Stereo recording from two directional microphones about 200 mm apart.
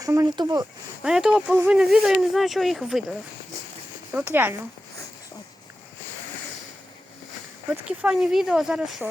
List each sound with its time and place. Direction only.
0.0 s speech: 15° right (ahead or behind)
1.0 s speech: 5° right (ahead or behind)
4.1 s speech: 10° right (ahead or behind)
7.7 s speech: 5° right (ahead or behind)